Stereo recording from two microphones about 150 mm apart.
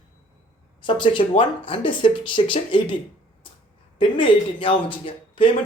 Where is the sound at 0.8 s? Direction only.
30° left (ahead or behind).